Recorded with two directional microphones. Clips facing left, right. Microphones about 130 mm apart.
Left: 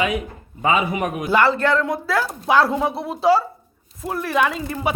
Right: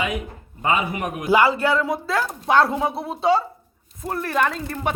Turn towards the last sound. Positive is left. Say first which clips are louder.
# left 2 dB
turn(degrees=5)  # may be behind; listen again after turning